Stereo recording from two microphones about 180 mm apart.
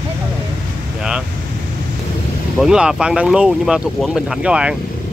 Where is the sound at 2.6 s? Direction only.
5° right (ahead or behind).